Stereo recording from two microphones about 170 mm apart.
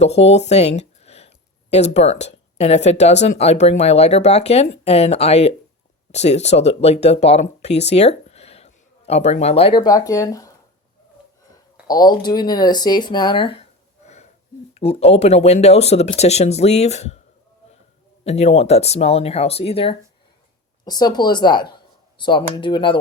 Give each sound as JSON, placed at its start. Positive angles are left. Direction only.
{"t": 0.0, "sound": "speech", "side_deg": 40}
{"t": 11.5, "sound": "speech", "side_deg": 20}
{"t": 18.3, "sound": "speech", "side_deg": 40}